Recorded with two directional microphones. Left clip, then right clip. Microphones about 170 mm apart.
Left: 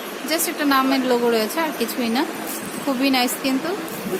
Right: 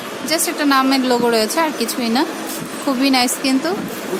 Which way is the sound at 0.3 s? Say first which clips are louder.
Right 4 dB; 15° right (ahead or behind).